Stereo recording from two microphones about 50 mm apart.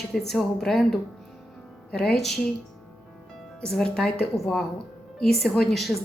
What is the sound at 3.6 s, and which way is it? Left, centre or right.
A woman's voice, centre.